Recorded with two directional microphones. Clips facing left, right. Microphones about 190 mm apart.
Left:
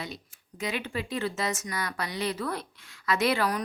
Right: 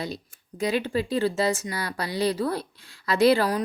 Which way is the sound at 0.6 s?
35° right (ahead or behind).